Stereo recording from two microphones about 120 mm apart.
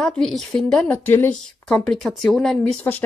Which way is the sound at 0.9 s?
20° left (ahead or behind).